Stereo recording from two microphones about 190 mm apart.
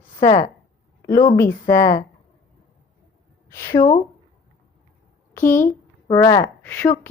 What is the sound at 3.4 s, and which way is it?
Speech, 15° left (ahead or behind).